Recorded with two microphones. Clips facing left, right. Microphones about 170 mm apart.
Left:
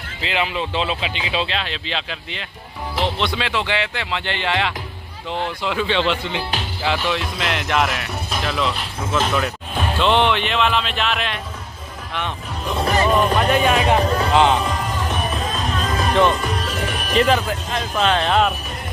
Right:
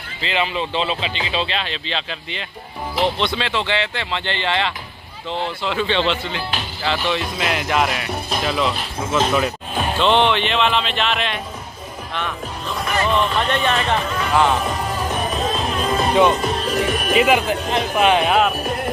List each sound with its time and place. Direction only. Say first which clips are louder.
0.2 s speech: right 1 dB; 5° left (ahead or behind)
7.1 s speech: right 1 dB; 5° right (ahead or behind)
9.9 s speech: right 1 dB; 5° left (ahead or behind)
12.7 s speech: left 2 dB; 35° left (ahead or behind)
13.4 s speech: left 3 dB; 5° left (ahead or behind)
16.1 s speech: right 1 dB; 15° right (ahead or behind)
17.5 s speech: right 4 dB; 20° right (ahead or behind)